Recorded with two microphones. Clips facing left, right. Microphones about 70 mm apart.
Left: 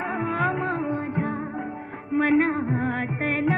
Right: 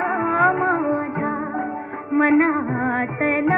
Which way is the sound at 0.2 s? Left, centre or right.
Right.